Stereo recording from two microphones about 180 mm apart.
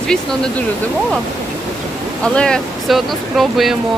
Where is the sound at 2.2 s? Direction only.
5° left (ahead or behind).